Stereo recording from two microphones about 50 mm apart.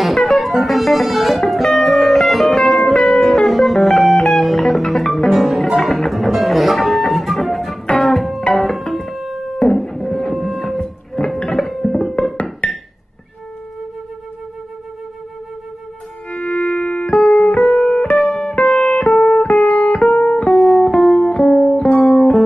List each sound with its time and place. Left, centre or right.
0.0 s music: centre
10.8 s music: centre
16.3 s music: centre
18.1 s music: centre
18.6 s music: centre
20.1 s music: centre